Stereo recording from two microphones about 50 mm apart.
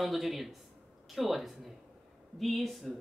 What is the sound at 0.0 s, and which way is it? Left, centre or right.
Speech, centre.